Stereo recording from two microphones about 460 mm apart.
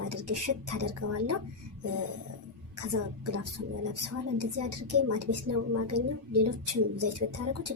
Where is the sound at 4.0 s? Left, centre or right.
Right.